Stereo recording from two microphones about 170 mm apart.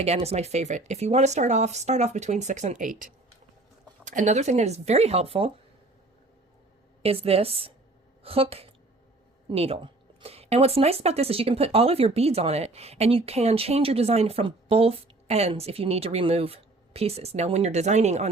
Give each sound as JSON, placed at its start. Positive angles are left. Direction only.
{"t": 0.0, "sound": "speech", "side_deg": -40}
{"t": 7.0, "sound": "speech", "side_deg": -35}